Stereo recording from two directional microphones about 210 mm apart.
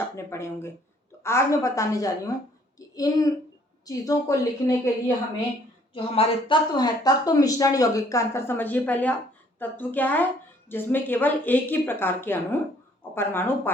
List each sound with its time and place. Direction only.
0.3 s a woman's voice: 10° left (ahead or behind)